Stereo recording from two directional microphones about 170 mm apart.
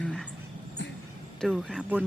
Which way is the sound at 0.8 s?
90° left.